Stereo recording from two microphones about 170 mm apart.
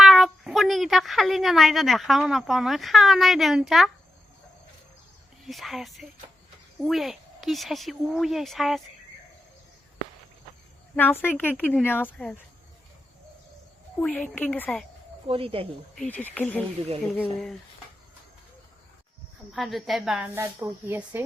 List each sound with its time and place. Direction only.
0.0 s a woman's voice: centre (ahead or behind)
5.5 s speech: centre (ahead or behind)
10.9 s speech: 10° left (ahead or behind)
14.0 s speech: 10° left (ahead or behind)
15.3 s speech: 35° right (ahead or behind)
16.0 s speech: 10° left (ahead or behind)
19.5 s a woman's voice: centre (ahead or behind)